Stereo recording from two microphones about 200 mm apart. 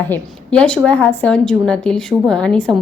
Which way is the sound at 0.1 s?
5° left (ahead or behind).